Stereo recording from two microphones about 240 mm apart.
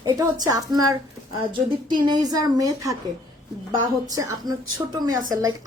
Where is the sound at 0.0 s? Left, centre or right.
Centre.